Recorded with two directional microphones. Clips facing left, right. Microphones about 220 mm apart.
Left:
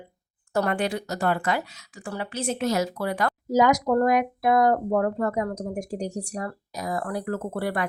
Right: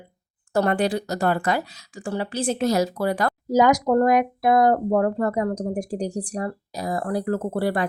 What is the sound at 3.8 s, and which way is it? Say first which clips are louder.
Speech: right 3 dB; 25° right (ahead or behind).